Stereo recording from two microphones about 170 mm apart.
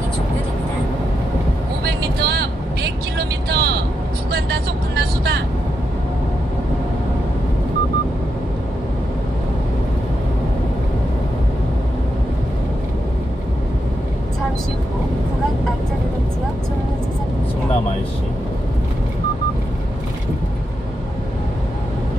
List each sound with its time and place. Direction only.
1.9 s vehicle: 70° right (ahead or behind)
4.3 s speech: 70° right (ahead or behind)